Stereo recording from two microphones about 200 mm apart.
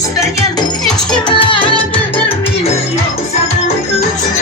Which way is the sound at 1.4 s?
25° left (ahead or behind).